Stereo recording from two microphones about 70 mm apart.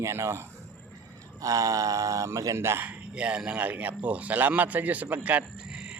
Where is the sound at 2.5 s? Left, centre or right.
Right.